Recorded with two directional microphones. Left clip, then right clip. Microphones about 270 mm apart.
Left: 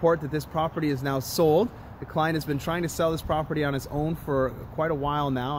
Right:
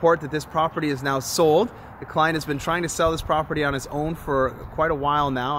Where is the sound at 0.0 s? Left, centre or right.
Centre.